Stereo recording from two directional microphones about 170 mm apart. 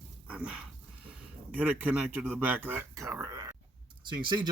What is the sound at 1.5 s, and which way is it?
Speech, 10° right (ahead or behind).